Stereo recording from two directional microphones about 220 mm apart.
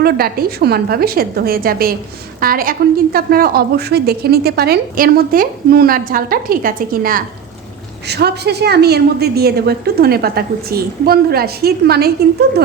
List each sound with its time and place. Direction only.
0.0 s a woman's voice: 45° right (ahead or behind)